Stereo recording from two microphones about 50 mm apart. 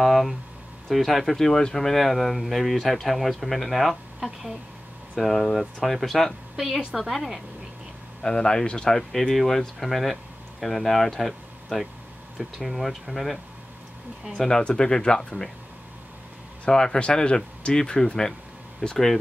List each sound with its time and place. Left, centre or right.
0.0 s a woman's voice: centre
8.2 s speech: centre
14.3 s speech: centre
16.6 s speech: centre